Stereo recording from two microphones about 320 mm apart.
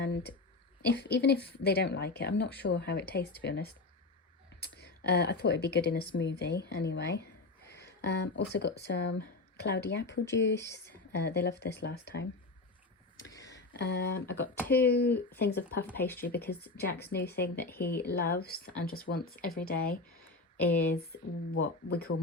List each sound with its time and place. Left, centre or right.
0.0 s a woman's voice: left
13.1 s a sound: centre
13.5 s a sound: left
14.3 s speech: centre
14.8 s a woman's voice: left
15.9 s speech: centre
16.7 s a woman's voice: left
21.1 s speech: left